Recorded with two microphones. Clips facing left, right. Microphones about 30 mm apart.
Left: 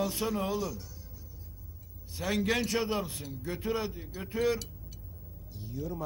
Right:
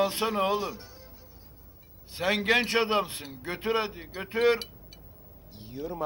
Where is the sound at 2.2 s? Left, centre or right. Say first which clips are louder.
Right 5 dB; right.